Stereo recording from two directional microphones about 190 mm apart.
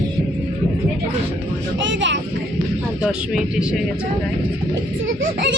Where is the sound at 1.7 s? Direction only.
70° right (ahead or behind).